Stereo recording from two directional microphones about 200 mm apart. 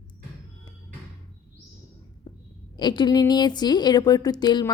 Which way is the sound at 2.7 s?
20° left (ahead or behind).